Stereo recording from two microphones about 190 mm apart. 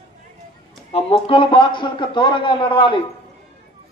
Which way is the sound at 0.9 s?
30° left (ahead or behind).